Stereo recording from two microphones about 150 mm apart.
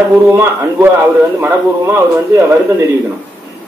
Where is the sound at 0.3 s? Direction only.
15° right (ahead or behind).